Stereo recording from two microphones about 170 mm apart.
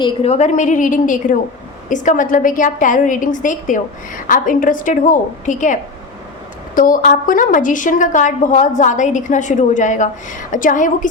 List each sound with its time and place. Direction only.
0.0 s a woman's voice: 35° left (ahead or behind)